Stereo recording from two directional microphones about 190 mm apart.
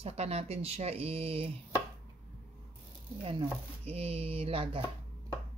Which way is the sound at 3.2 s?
30° right (ahead or behind).